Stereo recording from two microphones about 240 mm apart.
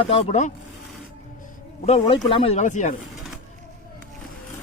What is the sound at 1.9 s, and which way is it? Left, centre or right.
A man's voice, left.